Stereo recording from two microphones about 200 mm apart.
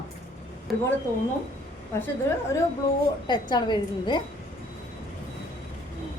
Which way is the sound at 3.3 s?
20° left (ahead or behind).